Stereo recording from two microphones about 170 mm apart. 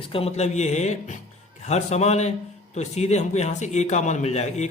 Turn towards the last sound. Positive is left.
turn(degrees=40)  # may be behind; listen again after turning